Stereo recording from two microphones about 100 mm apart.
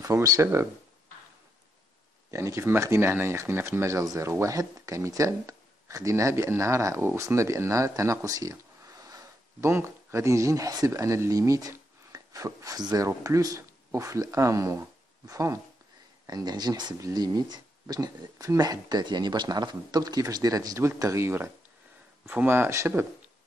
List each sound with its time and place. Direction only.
0.0 s speech: 35° right (ahead or behind)
2.3 s speech: 30° right (ahead or behind)
16.3 s speech: 45° right (ahead or behind); by 23.0 s 30° right (ahead or behind)